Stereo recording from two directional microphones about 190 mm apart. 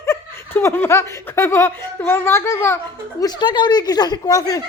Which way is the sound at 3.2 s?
20° left (ahead or behind).